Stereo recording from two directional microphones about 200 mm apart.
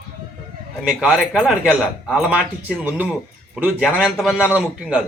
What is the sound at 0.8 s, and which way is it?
A man's voice, 5° right (ahead or behind).